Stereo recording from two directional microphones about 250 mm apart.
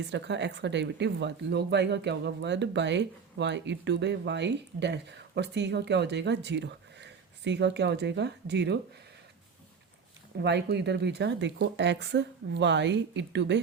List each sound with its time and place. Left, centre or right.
0.1 s speech: right
10.3 s speech: right